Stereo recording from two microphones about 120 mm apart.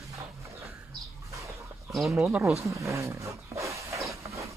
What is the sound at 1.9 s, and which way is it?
Speech, centre (ahead or behind).